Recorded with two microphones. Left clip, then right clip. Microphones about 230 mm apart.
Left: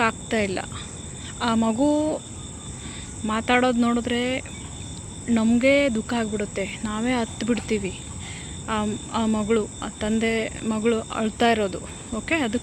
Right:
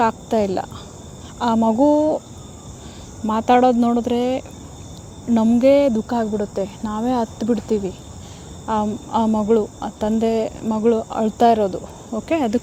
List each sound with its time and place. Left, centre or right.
0.0 s speech: right
3.2 s speech: right